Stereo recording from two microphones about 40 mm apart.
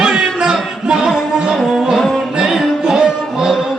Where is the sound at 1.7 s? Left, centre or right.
Centre.